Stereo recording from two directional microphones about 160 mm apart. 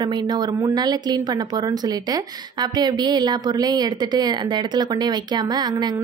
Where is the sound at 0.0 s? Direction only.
25° right (ahead or behind).